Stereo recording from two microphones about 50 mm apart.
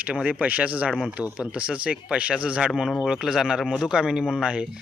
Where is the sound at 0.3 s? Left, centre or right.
Right.